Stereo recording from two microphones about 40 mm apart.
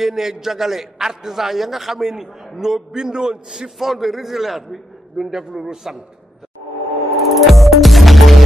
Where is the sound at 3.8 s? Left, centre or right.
Centre.